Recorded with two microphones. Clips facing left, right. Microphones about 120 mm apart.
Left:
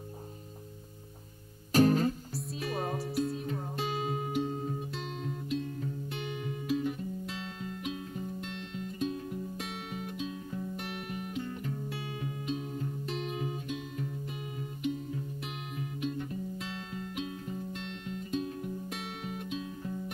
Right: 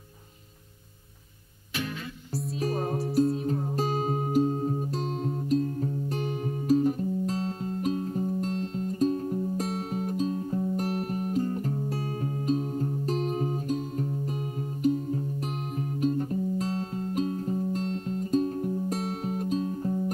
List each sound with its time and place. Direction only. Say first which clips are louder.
1.7 s music: left 11 dB; 40° left (ahead or behind)
2.8 s music: right 5 dB; centre (ahead or behind)
3.7 s music: right 3 dB; 40° right (ahead or behind)